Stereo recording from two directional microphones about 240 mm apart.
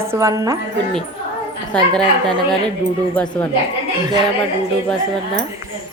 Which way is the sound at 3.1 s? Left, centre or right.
Centre.